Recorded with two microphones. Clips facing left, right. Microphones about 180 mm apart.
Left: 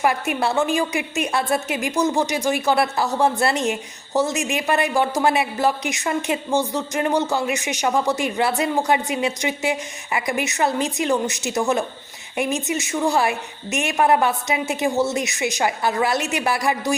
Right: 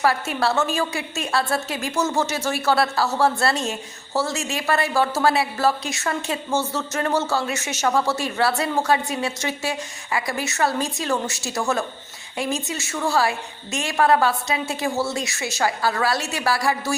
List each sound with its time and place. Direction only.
0.0 s a woman's voice: 15° left (ahead or behind)